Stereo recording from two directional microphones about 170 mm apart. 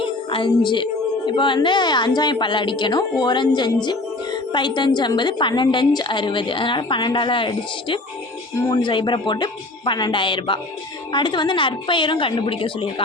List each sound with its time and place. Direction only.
0.0 s a woman's voice: 30° left (ahead or behind)